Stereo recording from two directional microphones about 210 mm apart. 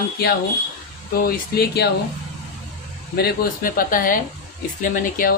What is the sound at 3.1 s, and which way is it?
A woman's voice, 45° left (ahead or behind).